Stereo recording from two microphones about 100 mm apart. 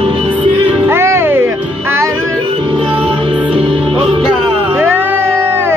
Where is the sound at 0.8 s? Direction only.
25° right (ahead or behind).